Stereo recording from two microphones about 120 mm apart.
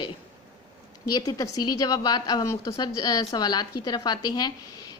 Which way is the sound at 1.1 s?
30° left (ahead or behind).